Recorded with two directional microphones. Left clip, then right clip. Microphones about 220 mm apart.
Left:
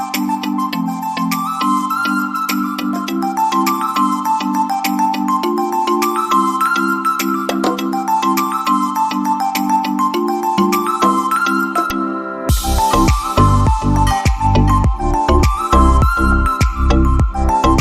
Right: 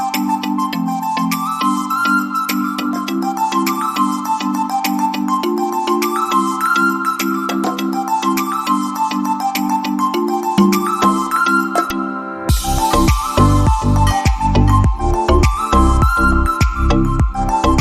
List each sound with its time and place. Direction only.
1.6 s music: centre (ahead or behind)
3.4 s music: centre (ahead or behind)
5.9 s music: centre (ahead or behind)
10.6 s music: centre (ahead or behind)
15.3 s music: centre (ahead or behind)
17.5 s music: centre (ahead or behind)